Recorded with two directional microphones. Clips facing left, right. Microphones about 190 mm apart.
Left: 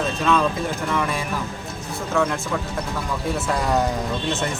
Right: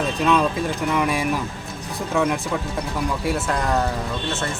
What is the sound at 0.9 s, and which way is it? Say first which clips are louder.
Speech: right 3 dB; 15° right (ahead or behind).